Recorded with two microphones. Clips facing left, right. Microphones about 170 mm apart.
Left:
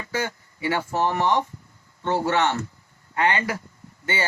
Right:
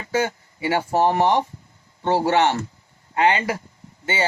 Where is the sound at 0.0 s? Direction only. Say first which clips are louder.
Right 5 dB; 25° right (ahead or behind).